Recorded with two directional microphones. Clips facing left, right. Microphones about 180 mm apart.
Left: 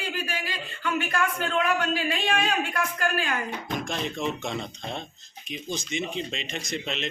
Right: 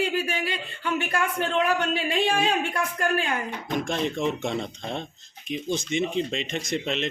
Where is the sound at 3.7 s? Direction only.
55° right (ahead or behind).